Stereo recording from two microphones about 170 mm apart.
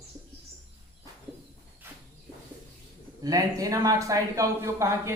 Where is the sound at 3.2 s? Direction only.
20° right (ahead or behind).